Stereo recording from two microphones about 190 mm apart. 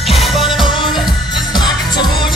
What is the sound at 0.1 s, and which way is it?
Music, centre (ahead or behind).